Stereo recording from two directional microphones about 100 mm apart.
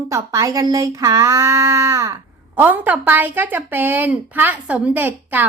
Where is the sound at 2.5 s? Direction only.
20° right (ahead or behind).